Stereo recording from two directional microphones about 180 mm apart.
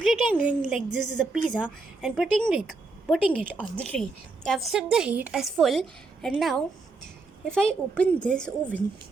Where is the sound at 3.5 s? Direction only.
5° left (ahead or behind).